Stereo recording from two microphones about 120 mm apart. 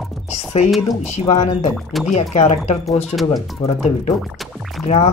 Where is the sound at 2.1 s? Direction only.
70° left (ahead or behind).